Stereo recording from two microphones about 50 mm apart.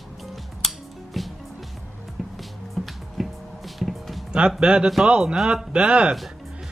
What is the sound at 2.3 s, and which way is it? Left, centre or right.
Music, centre.